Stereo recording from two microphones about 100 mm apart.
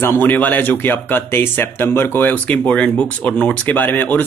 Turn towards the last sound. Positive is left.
turn(degrees=20)  # may be behind; listen again after turning